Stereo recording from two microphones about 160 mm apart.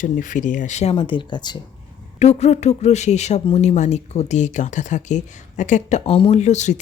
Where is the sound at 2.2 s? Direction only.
45° left (ahead or behind).